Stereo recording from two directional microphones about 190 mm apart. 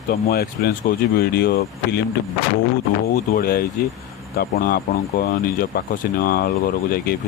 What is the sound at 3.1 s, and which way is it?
Speech, 50° left (ahead or behind).